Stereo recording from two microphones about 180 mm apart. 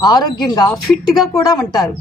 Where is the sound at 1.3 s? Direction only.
20° left (ahead or behind).